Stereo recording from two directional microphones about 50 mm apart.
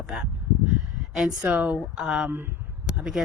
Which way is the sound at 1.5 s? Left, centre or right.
Right.